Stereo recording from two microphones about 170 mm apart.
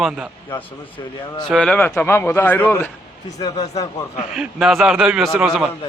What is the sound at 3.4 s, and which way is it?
Speech, 20° left (ahead or behind).